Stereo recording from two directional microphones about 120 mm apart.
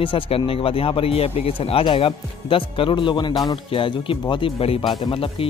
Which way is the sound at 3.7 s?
50° left (ahead or behind).